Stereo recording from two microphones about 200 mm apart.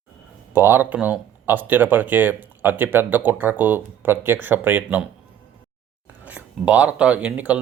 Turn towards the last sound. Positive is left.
turn(degrees=-5)  # may be behind; listen again after turning